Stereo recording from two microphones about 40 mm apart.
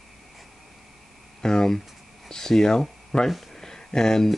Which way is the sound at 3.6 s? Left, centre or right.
Centre.